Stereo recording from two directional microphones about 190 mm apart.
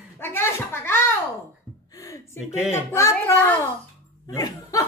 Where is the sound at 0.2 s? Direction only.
10° left (ahead or behind).